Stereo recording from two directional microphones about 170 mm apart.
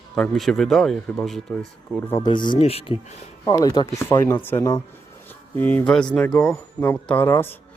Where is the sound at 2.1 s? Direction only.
25° left (ahead or behind).